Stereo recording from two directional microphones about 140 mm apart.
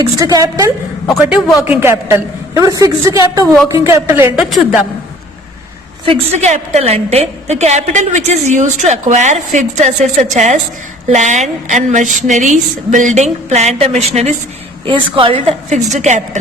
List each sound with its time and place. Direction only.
0.0 s a woman's voice: 25° right (ahead or behind)
4.4 s a woman's voice: centre (ahead or behind)
6.1 s a woman's voice: 55° right (ahead or behind)
14.8 s a woman's voice: 35° right (ahead or behind)
15.7 s a woman's voice: 55° right (ahead or behind)